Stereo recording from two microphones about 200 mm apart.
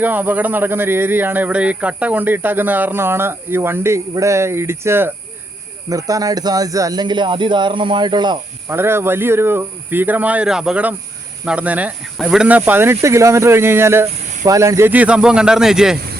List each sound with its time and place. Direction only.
0.0 s speech: 10° right (ahead or behind)